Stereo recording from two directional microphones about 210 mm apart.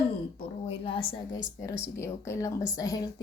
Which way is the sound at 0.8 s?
25° left (ahead or behind).